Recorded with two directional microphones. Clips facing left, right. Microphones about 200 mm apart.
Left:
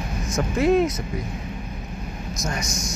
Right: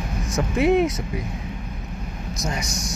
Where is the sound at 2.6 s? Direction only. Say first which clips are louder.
Even; 35° right (ahead or behind).